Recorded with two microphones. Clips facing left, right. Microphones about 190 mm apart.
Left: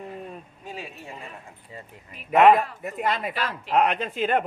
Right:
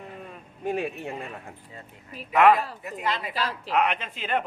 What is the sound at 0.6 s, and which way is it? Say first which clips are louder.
Speech: right 12 dB; 60° right (ahead or behind).